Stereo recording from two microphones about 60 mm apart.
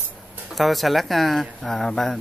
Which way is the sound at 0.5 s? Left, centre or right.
Centre.